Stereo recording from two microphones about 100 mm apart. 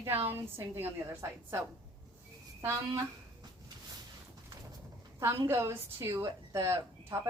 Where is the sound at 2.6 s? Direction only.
25° right (ahead or behind).